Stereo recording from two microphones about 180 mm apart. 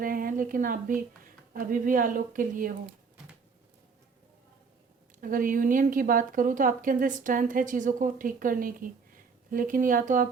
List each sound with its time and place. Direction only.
0.0 s a woman's voice: 50° right (ahead or behind)
5.2 s speech: 50° right (ahead or behind)